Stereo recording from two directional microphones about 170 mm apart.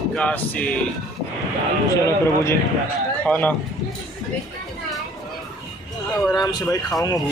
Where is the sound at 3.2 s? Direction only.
10° left (ahead or behind).